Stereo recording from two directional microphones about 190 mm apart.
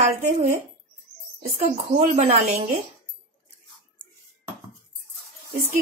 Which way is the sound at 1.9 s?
40° right (ahead or behind).